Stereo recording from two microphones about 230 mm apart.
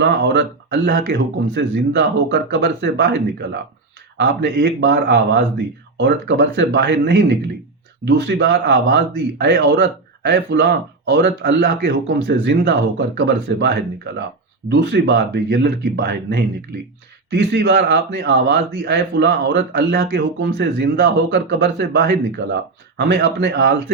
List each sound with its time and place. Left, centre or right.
0.0 s speech: right